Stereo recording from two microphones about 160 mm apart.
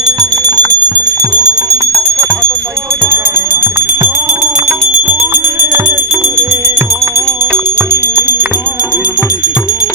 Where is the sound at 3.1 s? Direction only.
10° right (ahead or behind).